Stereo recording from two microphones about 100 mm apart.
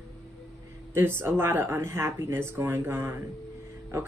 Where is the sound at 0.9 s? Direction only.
25° right (ahead or behind).